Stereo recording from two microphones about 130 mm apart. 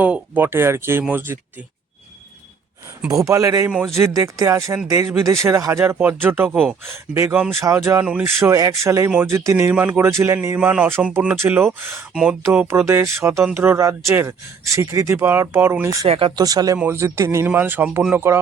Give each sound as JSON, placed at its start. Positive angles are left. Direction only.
{"t": 0.0, "sound": "speech", "side_deg": -15}
{"t": 3.1, "sound": "speech", "side_deg": -25}
{"t": 8.0, "sound": "speech", "side_deg": -10}
{"t": 8.4, "sound": "speech", "side_deg": -25}
{"t": 12.6, "sound": "speech", "side_deg": -20}
{"t": 16.0, "sound": "speech", "side_deg": -50}
{"t": 16.3, "sound": "speech", "side_deg": -30}
{"t": 16.7, "sound": "speech", "side_deg": -15}